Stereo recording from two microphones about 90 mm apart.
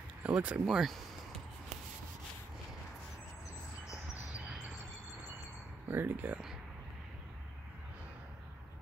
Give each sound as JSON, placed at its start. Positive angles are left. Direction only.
{"t": 0.2, "sound": "speech", "side_deg": -15}
{"t": 5.9, "sound": "speech", "side_deg": -20}